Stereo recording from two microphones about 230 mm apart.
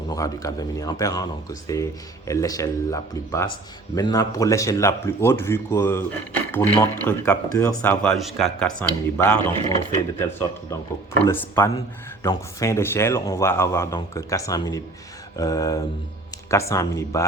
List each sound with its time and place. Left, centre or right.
0.1 s speech: centre
11.3 s speech: centre